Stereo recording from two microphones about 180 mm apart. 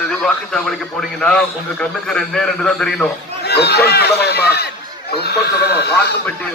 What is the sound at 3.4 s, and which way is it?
Speech, 65° left (ahead or behind).